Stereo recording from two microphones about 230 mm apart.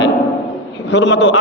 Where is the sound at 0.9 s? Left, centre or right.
Left.